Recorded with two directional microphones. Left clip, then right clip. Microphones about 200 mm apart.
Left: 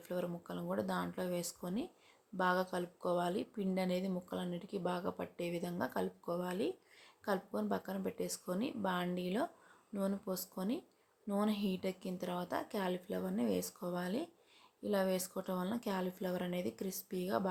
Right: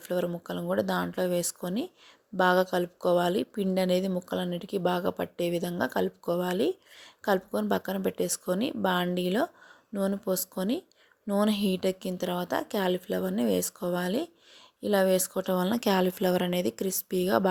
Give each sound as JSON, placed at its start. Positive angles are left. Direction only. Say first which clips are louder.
{"t": 0.0, "sound": "speech", "louder": "right 11 dB", "side_deg": -35}